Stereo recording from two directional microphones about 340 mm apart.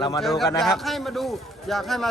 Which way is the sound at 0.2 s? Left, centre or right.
Centre.